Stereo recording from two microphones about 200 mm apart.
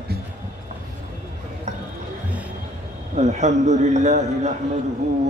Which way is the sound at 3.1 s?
35° right (ahead or behind).